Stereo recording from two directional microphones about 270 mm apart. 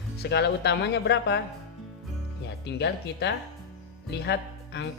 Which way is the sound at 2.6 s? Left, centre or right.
Left.